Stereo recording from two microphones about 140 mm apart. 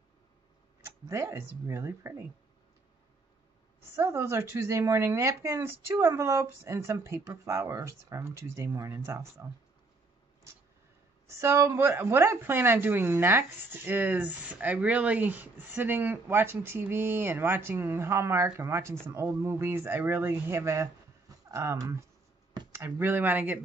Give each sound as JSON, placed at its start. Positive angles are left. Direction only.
{"t": 1.0, "sound": "speech", "side_deg": -20}
{"t": 3.9, "sound": "speech", "side_deg": -20}
{"t": 11.2, "sound": "a woman's voice", "side_deg": -20}